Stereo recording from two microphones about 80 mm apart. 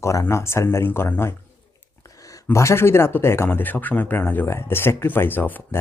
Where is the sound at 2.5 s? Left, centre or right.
Left.